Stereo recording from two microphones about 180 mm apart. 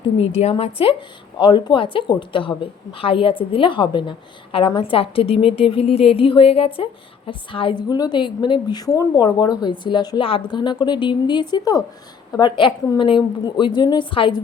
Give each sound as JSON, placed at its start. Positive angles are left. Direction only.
{"t": 0.2, "sound": "a woman's voice", "side_deg": 35}